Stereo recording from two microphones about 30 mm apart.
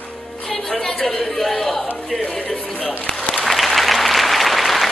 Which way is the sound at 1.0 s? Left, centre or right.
Centre.